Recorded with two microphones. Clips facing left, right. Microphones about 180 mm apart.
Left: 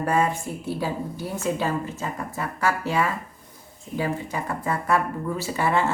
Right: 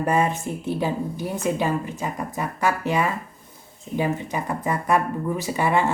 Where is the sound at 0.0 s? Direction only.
20° right (ahead or behind).